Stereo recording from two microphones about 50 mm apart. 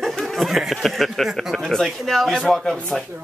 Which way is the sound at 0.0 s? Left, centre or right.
Centre.